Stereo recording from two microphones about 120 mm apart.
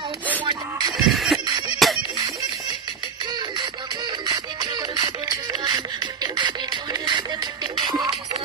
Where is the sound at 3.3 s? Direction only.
35° right (ahead or behind).